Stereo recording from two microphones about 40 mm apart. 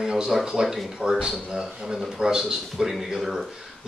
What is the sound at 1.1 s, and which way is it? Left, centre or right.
Speech, centre.